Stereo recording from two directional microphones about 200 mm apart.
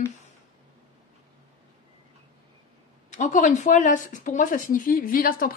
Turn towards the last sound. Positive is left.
turn(degrees=45)  # may be behind; listen again after turning